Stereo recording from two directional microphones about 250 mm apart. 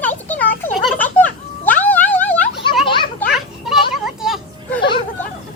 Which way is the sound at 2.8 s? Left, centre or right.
Centre.